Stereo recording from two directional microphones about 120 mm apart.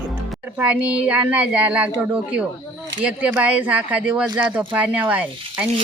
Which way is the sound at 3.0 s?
10° right (ahead or behind).